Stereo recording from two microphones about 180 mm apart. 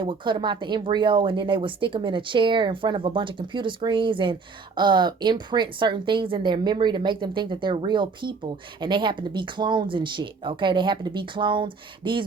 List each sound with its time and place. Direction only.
0.0 s speech: 25° right (ahead or behind)